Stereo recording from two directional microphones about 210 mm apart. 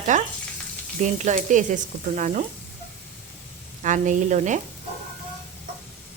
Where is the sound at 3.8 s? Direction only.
35° right (ahead or behind).